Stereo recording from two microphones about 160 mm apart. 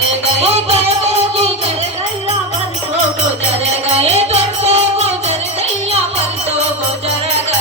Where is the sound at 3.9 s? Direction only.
40° right (ahead or behind).